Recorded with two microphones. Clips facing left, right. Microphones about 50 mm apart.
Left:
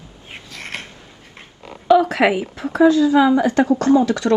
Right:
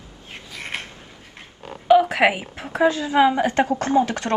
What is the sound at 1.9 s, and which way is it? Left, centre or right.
Speech, right.